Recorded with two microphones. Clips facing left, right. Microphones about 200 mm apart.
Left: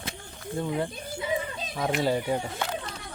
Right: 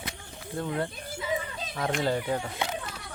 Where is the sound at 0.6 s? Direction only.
10° left (ahead or behind).